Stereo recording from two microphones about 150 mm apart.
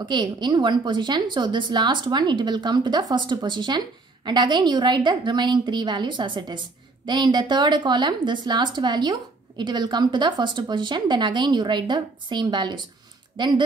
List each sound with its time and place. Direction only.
0.0 s speech: 30° right (ahead or behind)